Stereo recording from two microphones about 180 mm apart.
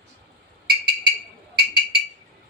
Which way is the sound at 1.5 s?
65° right (ahead or behind).